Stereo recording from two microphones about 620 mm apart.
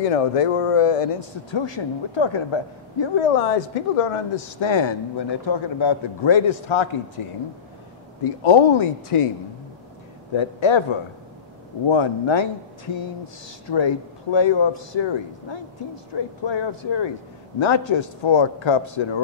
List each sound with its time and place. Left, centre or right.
0.0 s speech: left
10.3 s speech: left